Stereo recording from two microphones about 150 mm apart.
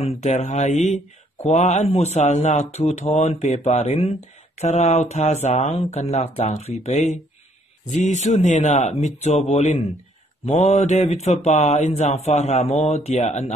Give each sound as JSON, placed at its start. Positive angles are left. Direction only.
{"t": 0.2, "sound": "speech", "side_deg": 50}